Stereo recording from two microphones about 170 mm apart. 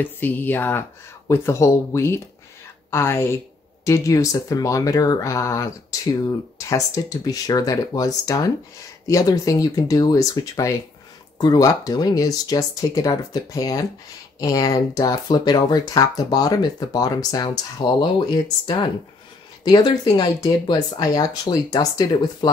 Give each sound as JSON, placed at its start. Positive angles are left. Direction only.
{"t": 0.0, "sound": "speech", "side_deg": 10}
{"t": 19.6, "sound": "speech", "side_deg": 25}